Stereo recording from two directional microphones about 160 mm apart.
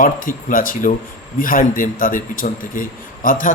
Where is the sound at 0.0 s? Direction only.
55° left (ahead or behind).